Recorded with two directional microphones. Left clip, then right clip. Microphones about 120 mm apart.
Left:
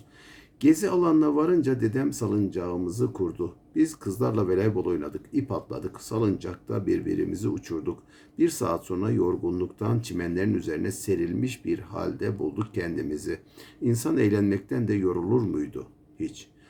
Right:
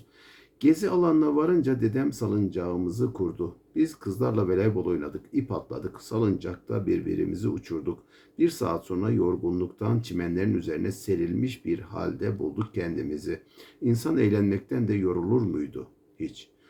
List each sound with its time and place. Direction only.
0.6 s speech: 25° left (ahead or behind)